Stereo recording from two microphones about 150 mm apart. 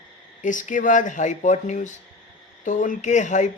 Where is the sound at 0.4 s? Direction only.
55° left (ahead or behind).